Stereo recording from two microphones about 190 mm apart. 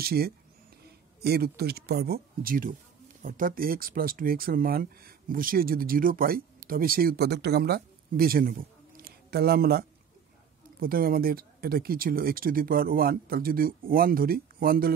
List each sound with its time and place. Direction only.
0.0 s speech: 55° right (ahead or behind)